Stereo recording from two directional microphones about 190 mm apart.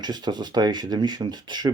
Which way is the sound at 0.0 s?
20° right (ahead or behind).